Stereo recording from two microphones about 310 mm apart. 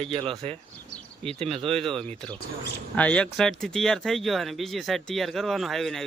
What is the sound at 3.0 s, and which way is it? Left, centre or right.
Speech, centre.